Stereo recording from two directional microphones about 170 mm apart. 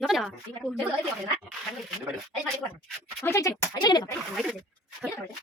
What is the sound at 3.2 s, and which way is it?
Speech, 15° left (ahead or behind).